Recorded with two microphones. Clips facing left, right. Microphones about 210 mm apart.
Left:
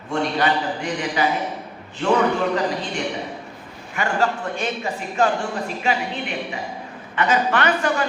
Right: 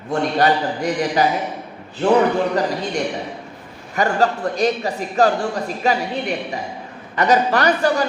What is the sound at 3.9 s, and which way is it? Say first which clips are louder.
A woman's voice: right 4 dB; 40° right (ahead or behind).